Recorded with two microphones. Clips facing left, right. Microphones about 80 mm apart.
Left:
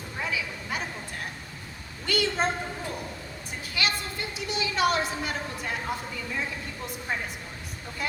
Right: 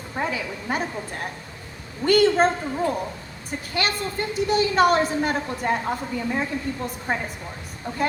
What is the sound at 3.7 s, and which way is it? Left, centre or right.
A woman's voice, right.